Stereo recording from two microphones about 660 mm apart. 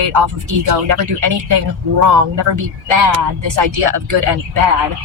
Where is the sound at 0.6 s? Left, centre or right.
Right.